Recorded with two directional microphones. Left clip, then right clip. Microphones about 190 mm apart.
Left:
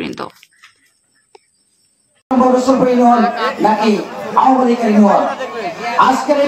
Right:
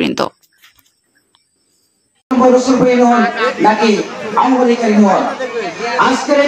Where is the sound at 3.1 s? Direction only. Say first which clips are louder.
Right 1 dB; 30° right (ahead or behind).